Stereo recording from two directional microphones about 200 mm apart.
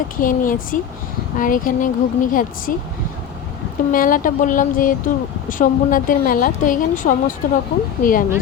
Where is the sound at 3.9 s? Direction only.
45° left (ahead or behind).